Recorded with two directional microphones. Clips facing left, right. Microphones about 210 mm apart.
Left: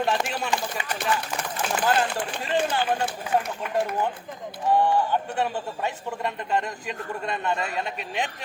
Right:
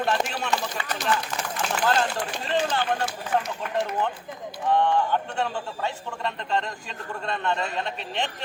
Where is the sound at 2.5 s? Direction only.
15° left (ahead or behind).